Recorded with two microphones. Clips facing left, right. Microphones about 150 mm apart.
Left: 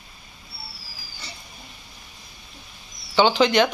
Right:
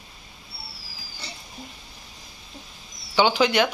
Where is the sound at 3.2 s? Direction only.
10° right (ahead or behind).